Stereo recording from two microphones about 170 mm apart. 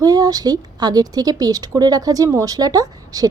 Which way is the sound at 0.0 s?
20° right (ahead or behind).